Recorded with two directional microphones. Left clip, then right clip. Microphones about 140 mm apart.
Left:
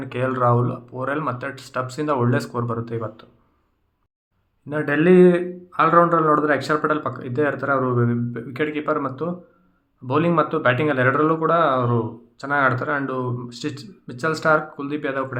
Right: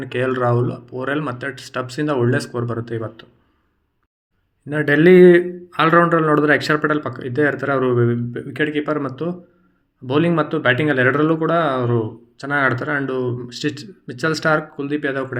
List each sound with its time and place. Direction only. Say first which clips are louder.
0.0 s speech: right 1 dB; 15° right (ahead or behind)
4.6 s speech: right 5 dB; 15° right (ahead or behind)
4.9 s speech: right 5 dB; 35° right (ahead or behind); by 15.4 s 15° right (ahead or behind)